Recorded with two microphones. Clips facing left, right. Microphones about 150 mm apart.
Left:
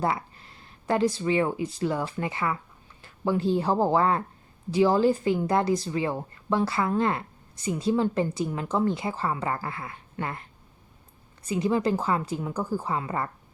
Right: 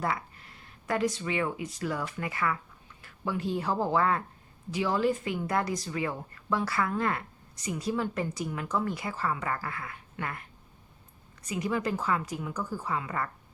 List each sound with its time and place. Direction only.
0.0 s speech: 30° left (ahead or behind)
11.4 s speech: 30° left (ahead or behind)